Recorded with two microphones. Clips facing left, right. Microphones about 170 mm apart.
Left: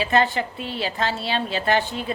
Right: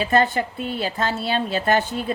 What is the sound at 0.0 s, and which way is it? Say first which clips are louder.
Speech: right 1 dB; 45° right (ahead or behind).